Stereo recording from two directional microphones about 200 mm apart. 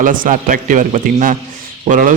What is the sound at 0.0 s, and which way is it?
A man's voice, 40° right (ahead or behind).